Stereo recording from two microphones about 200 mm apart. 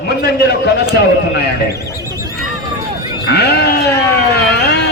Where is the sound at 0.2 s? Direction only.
50° left (ahead or behind).